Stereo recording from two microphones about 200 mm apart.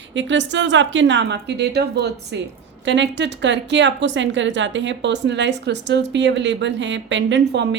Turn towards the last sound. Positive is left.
turn(degrees=-60)  # may be behind; listen again after turning